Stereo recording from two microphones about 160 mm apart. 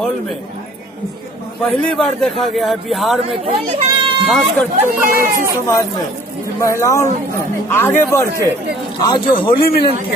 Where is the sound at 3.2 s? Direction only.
40° right (ahead or behind).